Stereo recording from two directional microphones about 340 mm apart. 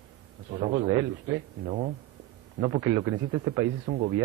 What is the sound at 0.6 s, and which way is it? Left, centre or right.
A man's voice, centre.